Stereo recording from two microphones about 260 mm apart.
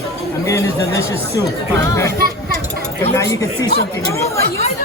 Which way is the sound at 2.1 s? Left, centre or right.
Right.